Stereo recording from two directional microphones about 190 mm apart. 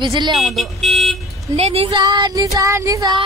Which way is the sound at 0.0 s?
25° right (ahead or behind).